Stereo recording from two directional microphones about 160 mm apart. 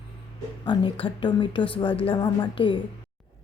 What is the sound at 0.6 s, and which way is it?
A woman's voice, 30° left (ahead or behind).